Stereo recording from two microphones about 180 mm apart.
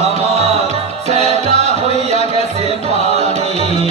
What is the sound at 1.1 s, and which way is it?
Music, 35° left (ahead or behind).